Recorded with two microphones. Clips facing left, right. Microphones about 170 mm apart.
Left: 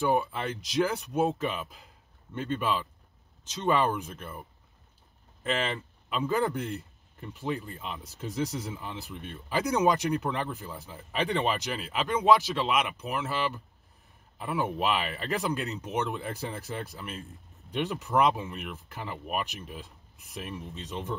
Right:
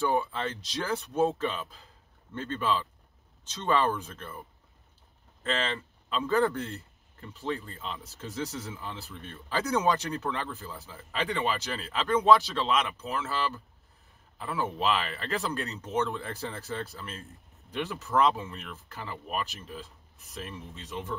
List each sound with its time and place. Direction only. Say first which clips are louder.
0.0 s speech: left 1 dB; 10° left (ahead or behind)
5.4 s speech: left 1 dB; 15° left (ahead or behind)